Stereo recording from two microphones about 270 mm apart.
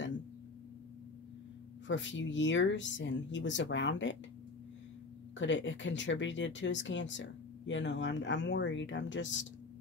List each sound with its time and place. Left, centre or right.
1.9 s speech: left
5.4 s speech: left